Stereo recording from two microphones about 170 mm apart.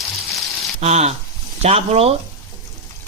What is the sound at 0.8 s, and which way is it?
Speech, 40° right (ahead or behind).